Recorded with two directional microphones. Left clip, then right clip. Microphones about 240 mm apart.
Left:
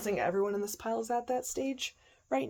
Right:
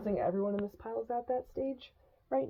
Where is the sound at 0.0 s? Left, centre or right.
Centre.